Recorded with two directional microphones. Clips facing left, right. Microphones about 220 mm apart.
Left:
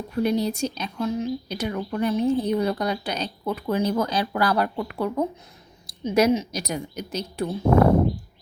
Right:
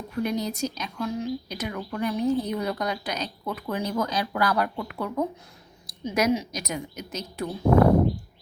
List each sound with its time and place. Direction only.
0.2 s speech: 30° left (ahead or behind)